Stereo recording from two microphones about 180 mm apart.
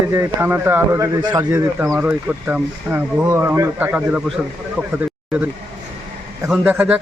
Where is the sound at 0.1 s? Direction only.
15° right (ahead or behind).